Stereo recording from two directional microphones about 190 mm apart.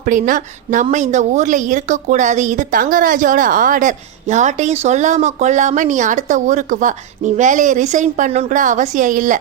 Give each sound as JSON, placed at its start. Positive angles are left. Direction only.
{"t": 0.0, "sound": "a woman's voice", "side_deg": -40}